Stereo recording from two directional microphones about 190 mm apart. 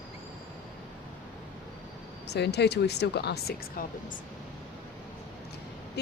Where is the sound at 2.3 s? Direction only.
60° left (ahead or behind).